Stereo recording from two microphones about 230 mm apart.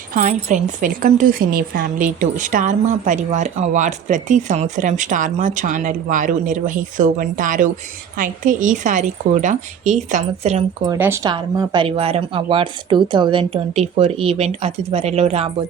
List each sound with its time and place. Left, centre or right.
0.1 s a woman's voice: right
10.8 s speech: centre; by 15.4 s right